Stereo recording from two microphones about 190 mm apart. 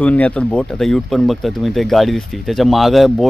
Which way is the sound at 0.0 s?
5° left (ahead or behind).